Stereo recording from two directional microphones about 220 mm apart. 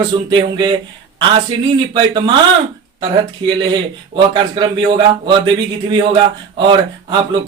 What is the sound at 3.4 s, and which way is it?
Speech, 20° right (ahead or behind).